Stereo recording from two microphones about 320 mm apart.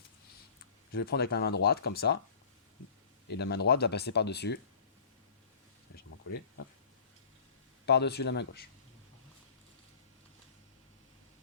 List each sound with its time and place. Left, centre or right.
0.9 s speech: left
3.2 s speech: left
7.9 s speech: left